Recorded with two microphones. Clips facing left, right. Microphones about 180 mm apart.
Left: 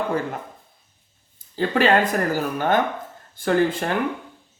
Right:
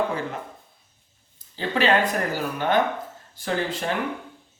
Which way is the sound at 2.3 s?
45° left (ahead or behind).